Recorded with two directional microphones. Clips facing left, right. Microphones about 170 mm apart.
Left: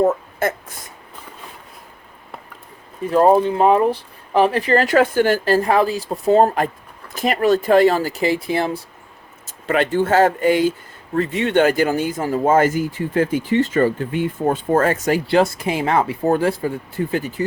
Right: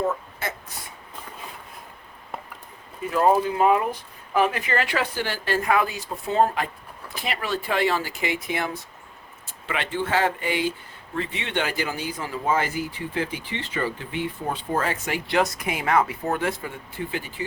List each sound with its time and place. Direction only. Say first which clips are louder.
0.0 s speech: left 9 dB; 45° left (ahead or behind)
3.0 s speech: left 6 dB; 35° left (ahead or behind)
5.5 s speech: left 6 dB; 35° left (ahead or behind)
9.5 s speech: left 10 dB; 45° left (ahead or behind)